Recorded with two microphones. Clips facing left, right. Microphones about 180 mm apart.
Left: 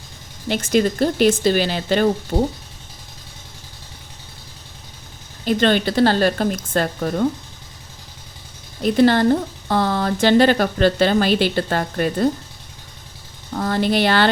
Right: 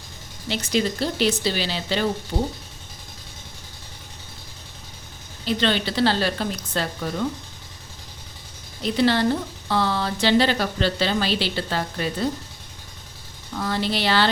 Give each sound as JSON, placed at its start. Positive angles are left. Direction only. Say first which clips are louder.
{"t": 0.4, "sound": "speech", "louder": "left 6 dB", "side_deg": 50}
{"t": 2.3, "sound": "speech", "louder": "left 5 dB", "side_deg": 65}
{"t": 5.5, "sound": "speech", "louder": "left 6 dB", "side_deg": 50}
{"t": 8.8, "sound": "speech", "louder": "left 5 dB", "side_deg": 50}
{"t": 13.5, "sound": "speech", "louder": "left 6 dB", "side_deg": 50}